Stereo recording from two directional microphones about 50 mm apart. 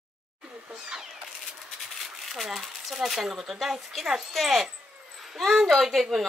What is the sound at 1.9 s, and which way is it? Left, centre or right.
Speech, centre.